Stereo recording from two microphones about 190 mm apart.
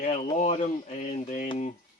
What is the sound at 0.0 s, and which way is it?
Speech, 40° left (ahead or behind).